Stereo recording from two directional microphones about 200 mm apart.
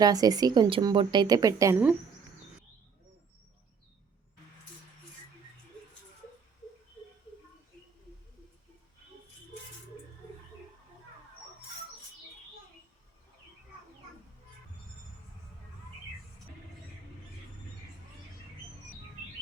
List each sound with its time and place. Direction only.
0.0 s speech: 20° right (ahead or behind)